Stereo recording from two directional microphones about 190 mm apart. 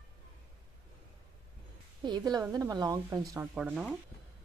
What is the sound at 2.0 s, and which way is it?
A woman's voice, 20° right (ahead or behind).